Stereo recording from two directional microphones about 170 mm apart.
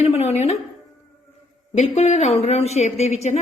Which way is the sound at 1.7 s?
40° left (ahead or behind).